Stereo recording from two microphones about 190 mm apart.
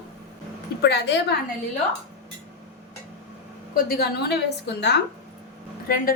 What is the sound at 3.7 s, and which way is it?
A woman's voice, 55° left (ahead or behind).